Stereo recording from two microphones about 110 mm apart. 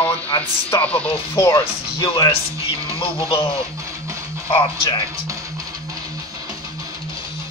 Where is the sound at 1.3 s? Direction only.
20° left (ahead or behind).